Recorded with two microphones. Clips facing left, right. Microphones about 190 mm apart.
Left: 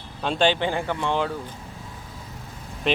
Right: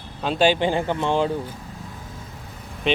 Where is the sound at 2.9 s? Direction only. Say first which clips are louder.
Right 2 dB; centre (ahead or behind).